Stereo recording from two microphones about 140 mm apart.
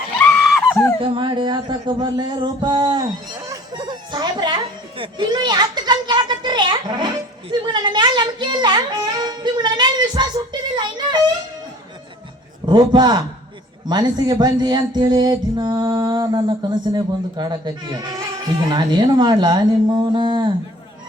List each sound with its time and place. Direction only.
0.2 s a sound: 5° left (ahead or behind)
0.9 s a sound: 40° right (ahead or behind)
4.9 s a child's voice: 35° right (ahead or behind)
12.6 s a man's voice: 30° right (ahead or behind)
13.8 s music: 30° right (ahead or behind)
18.7 s speech: 30° right (ahead or behind)